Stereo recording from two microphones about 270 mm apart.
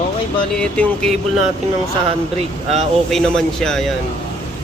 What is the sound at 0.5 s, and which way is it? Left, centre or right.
Speech, centre.